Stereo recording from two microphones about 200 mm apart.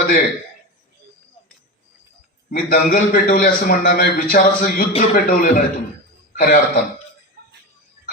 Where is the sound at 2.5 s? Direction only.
45° left (ahead or behind).